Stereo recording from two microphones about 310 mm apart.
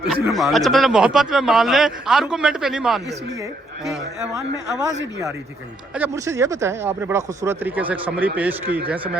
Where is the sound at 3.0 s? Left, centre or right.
Right.